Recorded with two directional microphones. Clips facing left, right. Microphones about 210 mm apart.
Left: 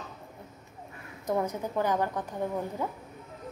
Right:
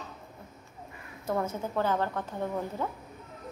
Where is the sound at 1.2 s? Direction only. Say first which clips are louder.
Left 1 dB; 15° left (ahead or behind).